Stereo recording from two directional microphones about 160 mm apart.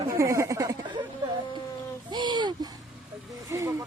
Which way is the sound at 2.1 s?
25° right (ahead or behind).